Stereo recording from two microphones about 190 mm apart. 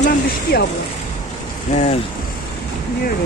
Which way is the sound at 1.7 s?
35° left (ahead or behind).